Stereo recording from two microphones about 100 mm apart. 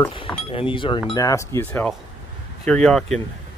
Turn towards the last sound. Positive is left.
turn(degrees=5)  # may be behind; listen again after turning